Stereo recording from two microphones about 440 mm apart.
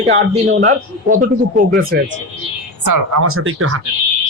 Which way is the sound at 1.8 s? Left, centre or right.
Right.